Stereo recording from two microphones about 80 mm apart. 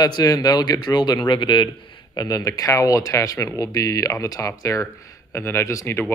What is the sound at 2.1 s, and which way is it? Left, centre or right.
Speech, left.